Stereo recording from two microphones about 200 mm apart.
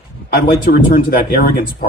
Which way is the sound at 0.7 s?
50° left (ahead or behind).